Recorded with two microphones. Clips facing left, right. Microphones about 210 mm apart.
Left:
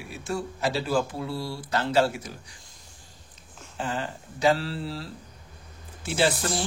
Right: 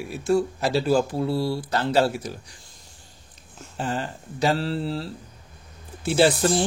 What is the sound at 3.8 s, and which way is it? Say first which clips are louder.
Speech: right 3 dB; 40° right (ahead or behind).